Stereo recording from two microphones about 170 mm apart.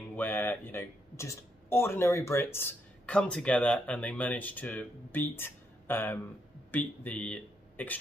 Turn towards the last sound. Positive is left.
turn(degrees=10)  # may be behind; listen again after turning